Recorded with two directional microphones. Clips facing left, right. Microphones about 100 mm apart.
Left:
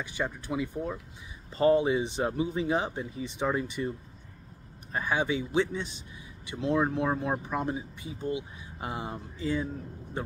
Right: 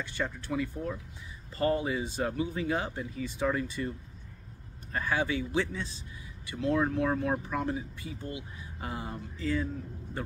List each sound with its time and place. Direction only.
0.0 s a man's voice: 15° left (ahead or behind)
4.9 s a man's voice: 20° left (ahead or behind)